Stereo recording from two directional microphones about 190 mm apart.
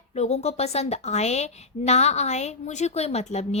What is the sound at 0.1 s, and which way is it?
A woman's voice, 35° left (ahead or behind).